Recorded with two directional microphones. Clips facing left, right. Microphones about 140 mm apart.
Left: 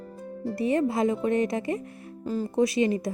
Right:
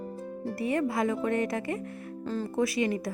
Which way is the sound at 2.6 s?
20° left (ahead or behind).